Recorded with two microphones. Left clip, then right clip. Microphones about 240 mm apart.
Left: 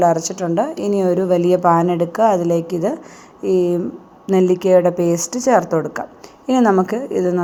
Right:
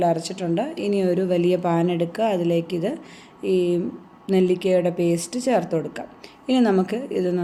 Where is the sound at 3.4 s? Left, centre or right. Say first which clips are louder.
Left 5 dB; left.